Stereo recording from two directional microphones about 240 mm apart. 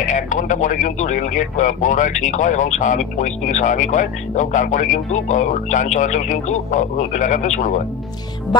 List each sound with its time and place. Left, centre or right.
0.0 s speech: left